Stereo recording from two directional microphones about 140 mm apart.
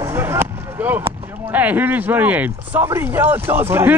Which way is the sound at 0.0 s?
15° right (ahead or behind).